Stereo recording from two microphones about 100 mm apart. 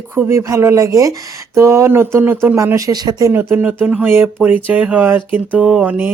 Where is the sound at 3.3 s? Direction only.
15° right (ahead or behind).